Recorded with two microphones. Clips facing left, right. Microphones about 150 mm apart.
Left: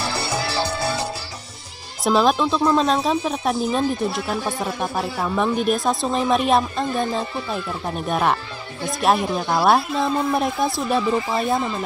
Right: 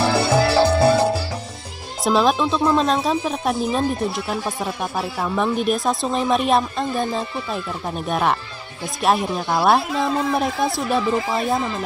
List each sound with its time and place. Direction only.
0.0 s music: 50° right (ahead or behind)
2.0 s speech: centre (ahead or behind)